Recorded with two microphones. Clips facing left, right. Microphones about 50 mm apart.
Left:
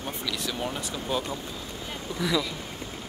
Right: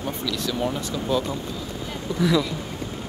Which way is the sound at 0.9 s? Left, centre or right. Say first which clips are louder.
Right 5 dB; left.